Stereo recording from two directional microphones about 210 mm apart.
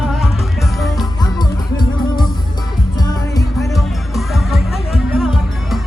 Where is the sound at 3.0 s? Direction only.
15° left (ahead or behind).